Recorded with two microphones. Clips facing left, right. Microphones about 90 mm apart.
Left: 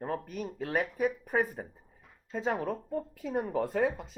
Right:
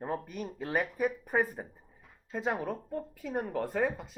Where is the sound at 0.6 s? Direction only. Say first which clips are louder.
Left 1 dB; 5° right (ahead or behind).